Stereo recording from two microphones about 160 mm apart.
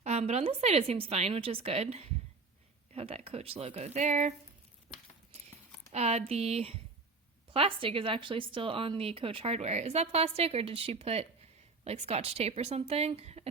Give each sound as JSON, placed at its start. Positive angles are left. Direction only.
{"t": 0.0, "sound": "speech", "side_deg": -45}
{"t": 5.9, "sound": "speech", "side_deg": -40}